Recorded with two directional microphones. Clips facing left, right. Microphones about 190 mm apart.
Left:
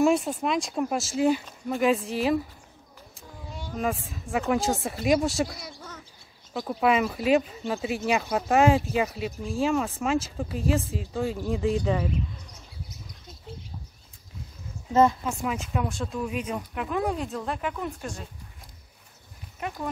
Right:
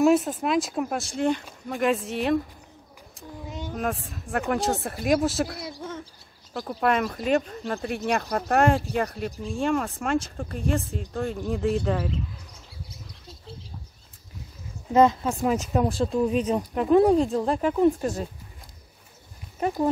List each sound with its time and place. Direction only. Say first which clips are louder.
0.0 s speech: right 2 dB; centre (ahead or behind)
3.4 s a sound: right 4 dB; 20° right (ahead or behind)
3.7 s speech: left 1 dB; centre (ahead or behind)
14.9 s speech: right 2 dB; 15° right (ahead or behind)
15.2 s speech: right 5 dB; 40° right (ahead or behind)